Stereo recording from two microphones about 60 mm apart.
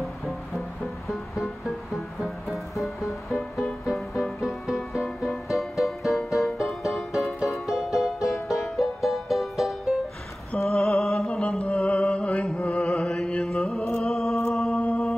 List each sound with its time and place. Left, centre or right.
2.0 s music: centre
10.6 s a sound: centre
11.4 s music: left
12.9 s mantra: centre
13.5 s music: centre
14.7 s humming: left